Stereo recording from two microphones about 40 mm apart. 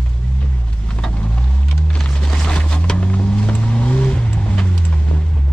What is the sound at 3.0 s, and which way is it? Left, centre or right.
Vehicle, left.